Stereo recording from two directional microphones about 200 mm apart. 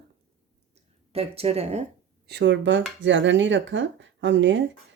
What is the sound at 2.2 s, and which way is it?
Speech, 60° right (ahead or behind).